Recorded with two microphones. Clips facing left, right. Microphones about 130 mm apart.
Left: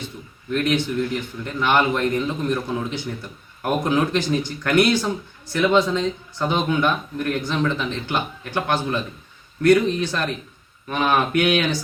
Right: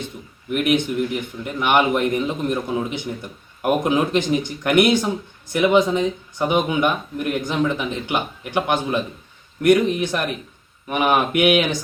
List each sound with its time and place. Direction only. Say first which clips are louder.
0.5 s a man's voice: right 2 dB; 15° right (ahead or behind)